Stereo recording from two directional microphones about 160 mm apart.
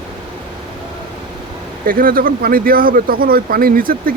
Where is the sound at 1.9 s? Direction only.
65° right (ahead or behind).